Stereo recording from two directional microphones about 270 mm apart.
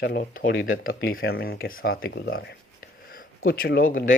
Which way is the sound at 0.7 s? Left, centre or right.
Left.